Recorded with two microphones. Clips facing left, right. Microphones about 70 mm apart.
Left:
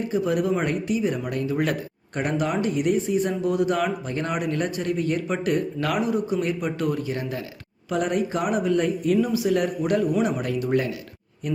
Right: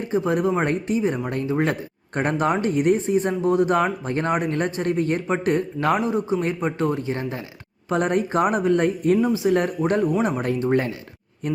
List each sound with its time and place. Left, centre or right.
0.1 s speech: right
2.1 s speech: right
9.2 s speech: right